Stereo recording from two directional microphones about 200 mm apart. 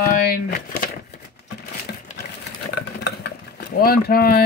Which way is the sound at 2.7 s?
50° left (ahead or behind).